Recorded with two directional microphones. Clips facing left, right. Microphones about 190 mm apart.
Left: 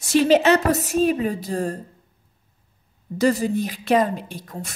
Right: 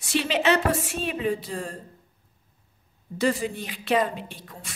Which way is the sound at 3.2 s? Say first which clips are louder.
Left 6 dB; 40° left (ahead or behind).